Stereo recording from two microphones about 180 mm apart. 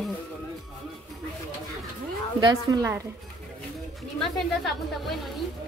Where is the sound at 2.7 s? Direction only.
15° right (ahead or behind).